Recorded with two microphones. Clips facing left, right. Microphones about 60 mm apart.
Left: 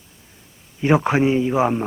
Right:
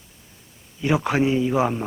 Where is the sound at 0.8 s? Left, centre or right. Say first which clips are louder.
Left 4 dB; left.